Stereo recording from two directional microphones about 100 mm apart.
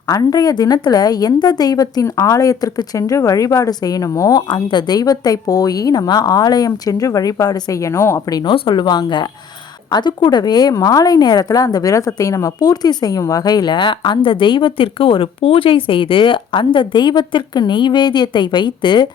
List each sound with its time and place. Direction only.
0.1 s a woman's voice: 40° left (ahead or behind)
8.5 s a woman's voice: 55° left (ahead or behind)